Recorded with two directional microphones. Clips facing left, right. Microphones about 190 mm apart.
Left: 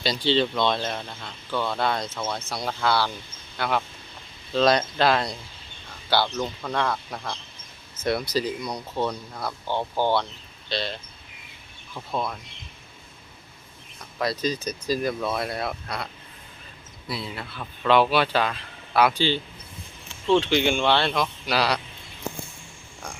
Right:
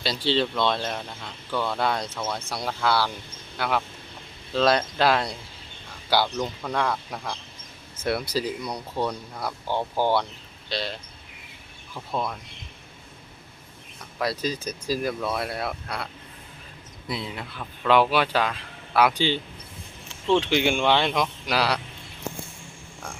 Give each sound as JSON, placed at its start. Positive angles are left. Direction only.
{"t": 0.0, "sound": "speech", "side_deg": -5}
{"t": 14.2, "sound": "speech", "side_deg": -10}
{"t": 17.1, "sound": "speech", "side_deg": -20}